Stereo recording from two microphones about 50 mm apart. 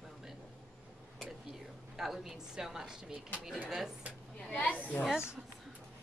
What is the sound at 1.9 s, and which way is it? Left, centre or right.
A woman's voice, centre.